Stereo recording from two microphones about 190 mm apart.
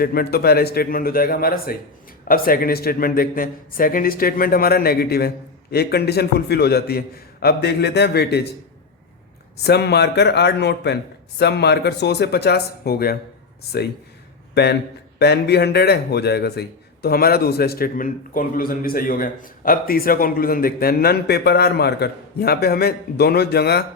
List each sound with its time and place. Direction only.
0.0 s a man's voice: 50° left (ahead or behind)
9.6 s a man's voice: 60° left (ahead or behind)
14.5 s a man's voice: 60° left (ahead or behind)